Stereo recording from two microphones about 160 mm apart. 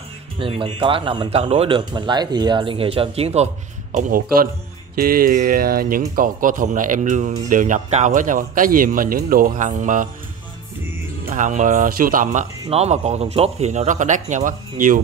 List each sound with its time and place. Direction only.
0.4 s speech: 35° right (ahead or behind)
3.9 s speech: 60° right (ahead or behind)
11.2 s speech: 50° right (ahead or behind)